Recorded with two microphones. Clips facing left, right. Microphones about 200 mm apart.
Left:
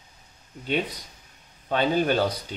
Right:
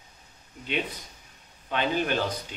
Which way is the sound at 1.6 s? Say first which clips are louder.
Left 4 dB; 35° left (ahead or behind).